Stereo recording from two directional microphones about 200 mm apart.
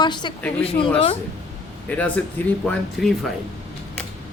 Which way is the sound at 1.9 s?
10° left (ahead or behind).